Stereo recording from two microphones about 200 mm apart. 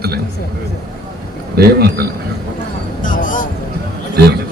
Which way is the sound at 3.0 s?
40° left (ahead or behind).